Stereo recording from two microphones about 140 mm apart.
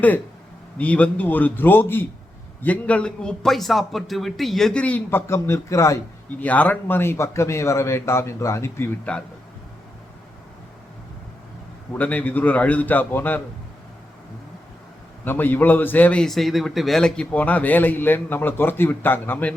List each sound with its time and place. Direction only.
0.8 s a man's voice: 10° left (ahead or behind)
6.4 s speech: 10° left (ahead or behind)
11.9 s a man's voice: 10° left (ahead or behind)
15.2 s a man's voice: 15° left (ahead or behind)